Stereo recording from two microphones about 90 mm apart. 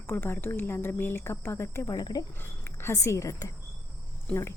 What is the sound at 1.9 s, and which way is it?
Speech, 45° left (ahead or behind).